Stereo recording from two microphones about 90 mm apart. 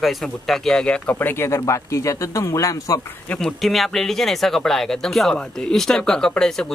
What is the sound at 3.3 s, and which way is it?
Speech, 5° left (ahead or behind).